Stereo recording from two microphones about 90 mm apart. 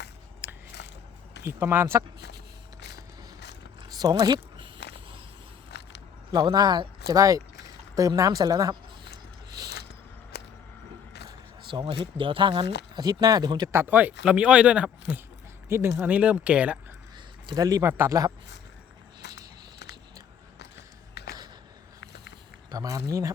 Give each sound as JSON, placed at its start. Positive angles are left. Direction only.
{"t": 0.4, "sound": "biting", "side_deg": -15}
{"t": 1.5, "sound": "speech", "side_deg": -25}
{"t": 3.8, "sound": "a sound", "side_deg": -45}
{"t": 6.3, "sound": "speech", "side_deg": -50}
{"t": 11.7, "sound": "speech", "side_deg": -65}
{"t": 13.7, "sound": "speech", "side_deg": -25}
{"t": 15.7, "sound": "speech", "side_deg": -25}
{"t": 17.4, "sound": "a man's voice", "side_deg": -50}
{"t": 17.8, "sound": "speech", "side_deg": -25}
{"t": 22.7, "sound": "a sound", "side_deg": -40}